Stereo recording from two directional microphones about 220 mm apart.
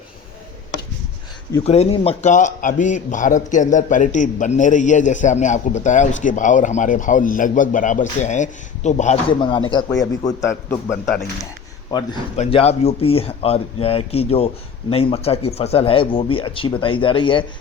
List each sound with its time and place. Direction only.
1.6 s a man's voice: 30° left (ahead or behind)